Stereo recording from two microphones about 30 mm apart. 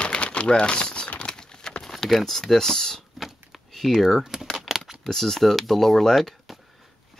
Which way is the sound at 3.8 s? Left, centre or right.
Centre.